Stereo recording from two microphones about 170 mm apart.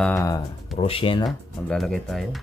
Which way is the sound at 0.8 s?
30° left (ahead or behind).